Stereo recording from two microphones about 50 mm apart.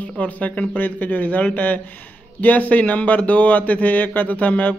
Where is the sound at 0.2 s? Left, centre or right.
Left.